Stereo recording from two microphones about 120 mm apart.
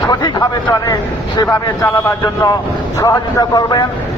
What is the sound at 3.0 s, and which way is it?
Speech, 30° left (ahead or behind).